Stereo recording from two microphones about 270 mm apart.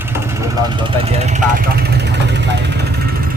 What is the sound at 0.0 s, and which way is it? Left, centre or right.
Vehicle, centre.